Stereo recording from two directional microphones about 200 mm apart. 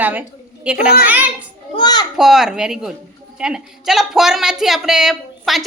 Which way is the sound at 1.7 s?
20° left (ahead or behind).